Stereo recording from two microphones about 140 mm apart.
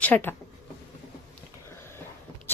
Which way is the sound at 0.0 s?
10° left (ahead or behind).